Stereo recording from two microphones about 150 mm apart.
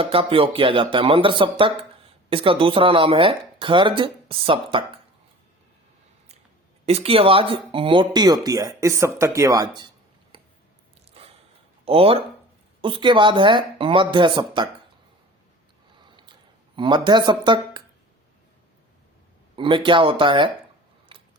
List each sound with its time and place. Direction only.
0.0 s speech: 40° right (ahead or behind)
6.8 s speech: 40° right (ahead or behind); by 9.9 s 25° right (ahead or behind)
11.2 s gasp: 40° right (ahead or behind)
11.9 s speech: 40° right (ahead or behind)
16.0 s a sound: 30° right (ahead or behind)
19.5 s speech: 35° right (ahead or behind)